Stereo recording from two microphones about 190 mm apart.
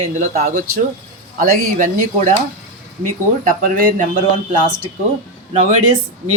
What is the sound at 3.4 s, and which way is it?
Speech, 50° right (ahead or behind).